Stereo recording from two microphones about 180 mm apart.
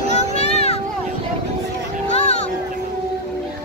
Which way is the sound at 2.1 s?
35° left (ahead or behind).